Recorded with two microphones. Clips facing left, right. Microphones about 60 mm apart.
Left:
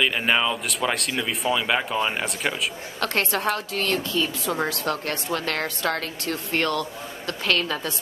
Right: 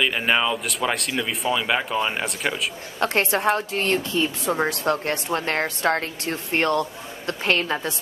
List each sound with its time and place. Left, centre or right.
0.0 s speech: centre
3.0 s speech: right